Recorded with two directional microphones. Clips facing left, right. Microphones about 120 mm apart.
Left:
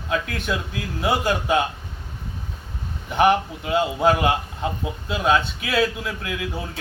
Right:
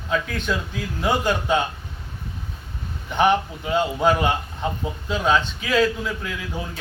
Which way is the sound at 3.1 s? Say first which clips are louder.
Left 1 dB; 5° left (ahead or behind).